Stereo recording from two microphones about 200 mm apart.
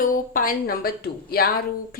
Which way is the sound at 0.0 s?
45° left (ahead or behind).